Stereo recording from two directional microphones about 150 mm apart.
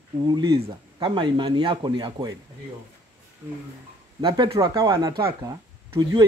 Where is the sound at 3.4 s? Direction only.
15° right (ahead or behind).